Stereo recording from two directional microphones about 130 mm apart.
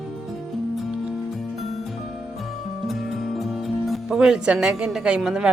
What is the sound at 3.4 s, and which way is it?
Music, centre (ahead or behind).